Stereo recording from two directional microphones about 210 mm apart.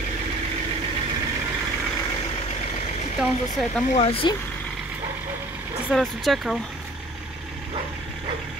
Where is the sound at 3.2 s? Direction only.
Centre (ahead or behind).